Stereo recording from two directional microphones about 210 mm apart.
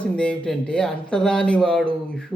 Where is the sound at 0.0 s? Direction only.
5° left (ahead or behind).